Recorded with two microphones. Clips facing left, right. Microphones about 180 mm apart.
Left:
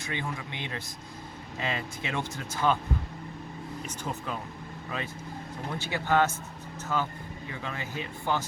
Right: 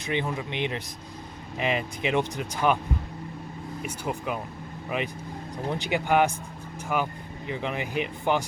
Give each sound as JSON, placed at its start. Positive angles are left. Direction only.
{"t": 0.0, "sound": "speech", "side_deg": -20}
{"t": 3.8, "sound": "speech", "side_deg": -10}